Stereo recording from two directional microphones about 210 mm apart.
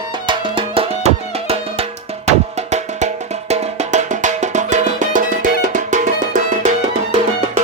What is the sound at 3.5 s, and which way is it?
Music, 35° right (ahead or behind).